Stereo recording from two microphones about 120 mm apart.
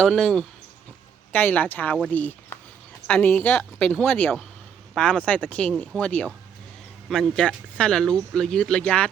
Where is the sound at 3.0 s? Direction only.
15° left (ahead or behind).